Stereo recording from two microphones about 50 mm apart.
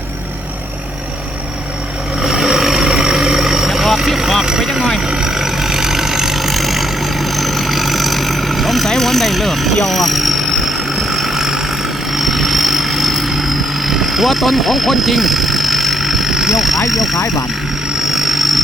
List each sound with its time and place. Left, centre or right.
2.2 s vehicle: centre
5.0 s vehicle: centre
16.9 s speech: centre
17.2 s speech: left
18.0 s vehicle: centre